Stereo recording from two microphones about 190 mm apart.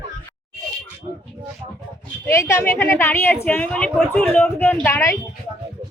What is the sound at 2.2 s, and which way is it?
A woman's voice, 15° left (ahead or behind).